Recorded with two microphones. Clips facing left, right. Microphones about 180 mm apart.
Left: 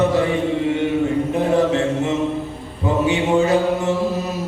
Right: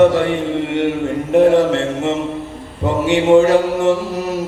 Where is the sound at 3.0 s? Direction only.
90° right.